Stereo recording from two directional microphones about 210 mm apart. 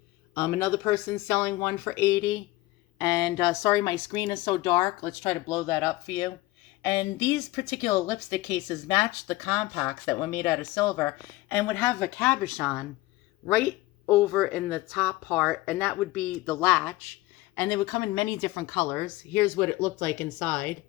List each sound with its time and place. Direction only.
0.3 s speech: 10° left (ahead or behind)
3.5 s speech: 15° left (ahead or behind)
14.1 s speech: 5° left (ahead or behind)